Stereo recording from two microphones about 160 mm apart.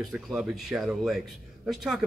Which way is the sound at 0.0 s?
Centre (ahead or behind).